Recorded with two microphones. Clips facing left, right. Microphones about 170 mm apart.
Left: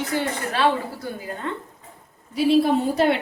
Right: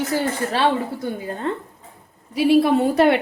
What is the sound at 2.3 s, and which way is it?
Speech, 65° right (ahead or behind).